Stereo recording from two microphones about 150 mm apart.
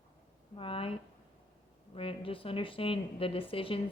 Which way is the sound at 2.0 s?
35° left (ahead or behind).